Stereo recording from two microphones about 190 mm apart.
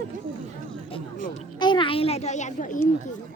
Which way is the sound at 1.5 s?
25° left (ahead or behind).